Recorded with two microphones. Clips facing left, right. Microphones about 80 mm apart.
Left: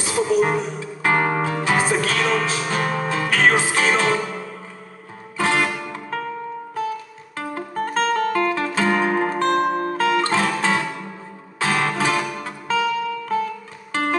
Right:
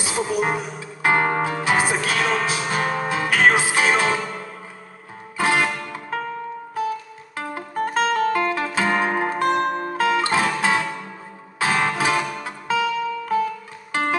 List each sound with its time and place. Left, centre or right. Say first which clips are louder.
0.0 s music: left 4 dB; centre
7.3 s music: even; centre